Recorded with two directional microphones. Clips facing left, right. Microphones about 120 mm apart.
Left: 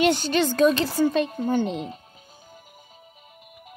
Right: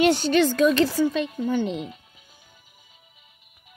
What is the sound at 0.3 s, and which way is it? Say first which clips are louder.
Speech: right 1 dB; 30° left (ahead or behind).